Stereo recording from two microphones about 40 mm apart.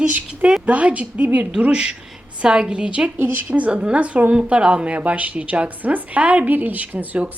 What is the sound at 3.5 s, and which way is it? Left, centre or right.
Speech, right.